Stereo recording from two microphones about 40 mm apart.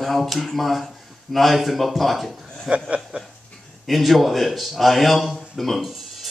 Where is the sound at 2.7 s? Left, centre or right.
Right.